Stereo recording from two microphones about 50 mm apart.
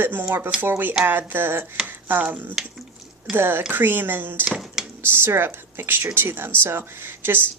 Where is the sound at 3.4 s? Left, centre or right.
Right.